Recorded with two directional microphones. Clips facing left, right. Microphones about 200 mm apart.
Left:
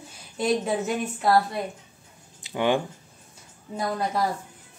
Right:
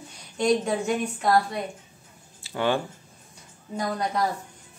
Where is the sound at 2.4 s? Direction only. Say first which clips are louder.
Left 2 dB; 15° left (ahead or behind).